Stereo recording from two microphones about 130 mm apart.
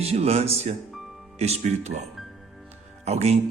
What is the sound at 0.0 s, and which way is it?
A man's voice, 50° right (ahead or behind).